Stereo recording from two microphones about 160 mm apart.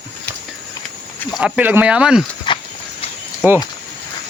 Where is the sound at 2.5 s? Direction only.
30° left (ahead or behind).